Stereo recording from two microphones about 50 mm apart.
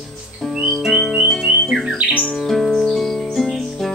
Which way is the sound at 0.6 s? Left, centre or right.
Centre.